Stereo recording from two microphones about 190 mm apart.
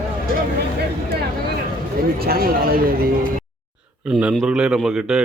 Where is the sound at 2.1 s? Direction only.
55° right (ahead or behind).